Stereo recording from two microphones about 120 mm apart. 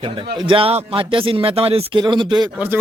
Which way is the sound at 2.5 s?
15° right (ahead or behind).